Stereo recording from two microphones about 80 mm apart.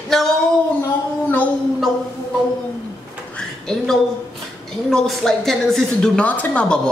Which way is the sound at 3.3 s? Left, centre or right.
Centre.